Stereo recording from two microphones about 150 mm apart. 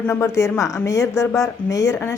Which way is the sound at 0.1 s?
20° left (ahead or behind).